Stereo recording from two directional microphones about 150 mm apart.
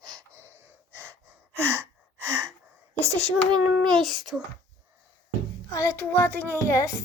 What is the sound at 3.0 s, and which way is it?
A child's voice, 5° left (ahead or behind).